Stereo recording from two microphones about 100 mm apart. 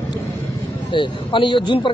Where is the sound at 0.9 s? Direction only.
55° left (ahead or behind).